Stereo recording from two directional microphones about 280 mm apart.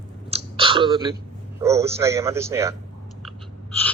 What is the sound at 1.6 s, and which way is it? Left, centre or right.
A man's voice, centre.